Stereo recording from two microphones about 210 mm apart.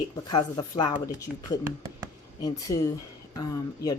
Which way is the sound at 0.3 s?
20° left (ahead or behind).